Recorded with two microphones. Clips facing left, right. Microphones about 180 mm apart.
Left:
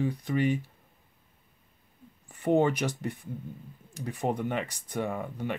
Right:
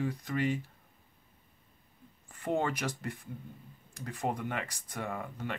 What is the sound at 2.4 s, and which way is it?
Speech, 20° left (ahead or behind).